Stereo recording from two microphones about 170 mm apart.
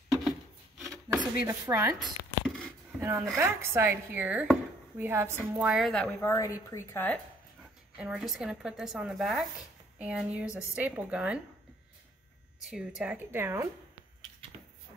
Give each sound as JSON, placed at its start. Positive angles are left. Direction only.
{"t": 1.1, "sound": "speech", "side_deg": -15}
{"t": 2.0, "sound": "a sound", "side_deg": 0}
{"t": 3.0, "sound": "a woman's voice", "side_deg": -15}
{"t": 6.3, "sound": "speech", "side_deg": 20}
{"t": 8.0, "sound": "a woman's voice", "side_deg": -5}
{"t": 12.6, "sound": "speech", "side_deg": -5}